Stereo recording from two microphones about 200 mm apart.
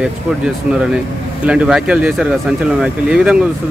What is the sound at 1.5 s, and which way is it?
Speech, 5° right (ahead or behind).